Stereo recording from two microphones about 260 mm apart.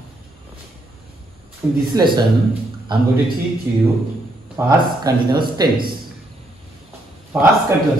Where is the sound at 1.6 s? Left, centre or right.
Centre.